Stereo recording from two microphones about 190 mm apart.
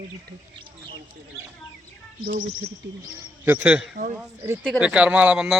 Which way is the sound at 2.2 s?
45° right (ahead or behind).